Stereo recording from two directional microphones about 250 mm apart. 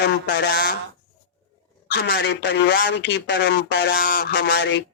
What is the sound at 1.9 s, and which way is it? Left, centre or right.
Speech, left.